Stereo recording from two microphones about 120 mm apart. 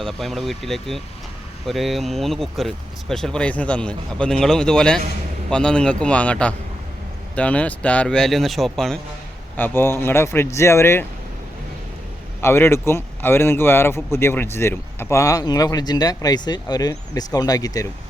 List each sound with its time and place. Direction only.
0.0 s speech: centre (ahead or behind)
9.6 s speech: 15° left (ahead or behind)
12.4 s speech: 20° left (ahead or behind)